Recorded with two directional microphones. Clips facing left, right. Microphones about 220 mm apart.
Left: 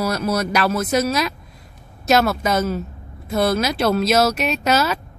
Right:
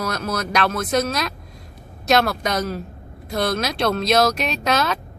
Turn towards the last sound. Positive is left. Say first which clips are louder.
# left 2 dB
turn(degrees=5)  # may be behind; listen again after turning